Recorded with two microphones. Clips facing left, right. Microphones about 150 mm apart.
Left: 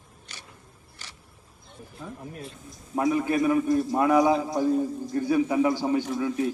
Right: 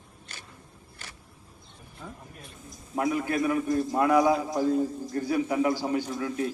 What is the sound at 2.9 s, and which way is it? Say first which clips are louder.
A man's voice: left 3 dB; 25° left (ahead or behind).